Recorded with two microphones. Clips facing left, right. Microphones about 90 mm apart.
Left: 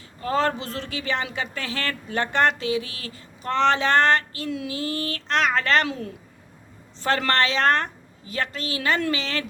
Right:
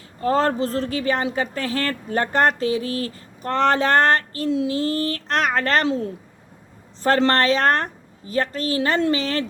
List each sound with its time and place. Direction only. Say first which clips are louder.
0.2 s a woman's voice: right 4 dB; 40° right (ahead or behind)
4.4 s a woman's voice: right 7 dB; 30° right (ahead or behind)
7.2 s a woman's voice: right 4 dB; 40° right (ahead or behind)